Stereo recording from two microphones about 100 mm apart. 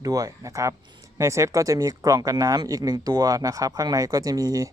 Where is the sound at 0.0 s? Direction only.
35° right (ahead or behind).